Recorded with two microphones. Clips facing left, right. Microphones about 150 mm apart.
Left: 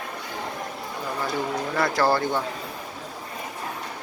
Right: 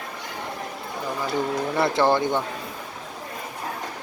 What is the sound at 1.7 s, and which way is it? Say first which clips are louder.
Speech: right 2 dB; 25° right (ahead or behind).